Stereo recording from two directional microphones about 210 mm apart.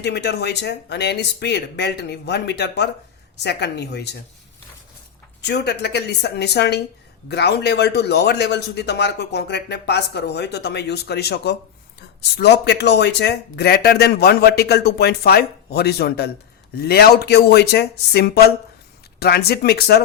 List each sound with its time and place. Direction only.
0.0 s a man's voice: 50° left (ahead or behind)
5.4 s a man's voice: 55° left (ahead or behind)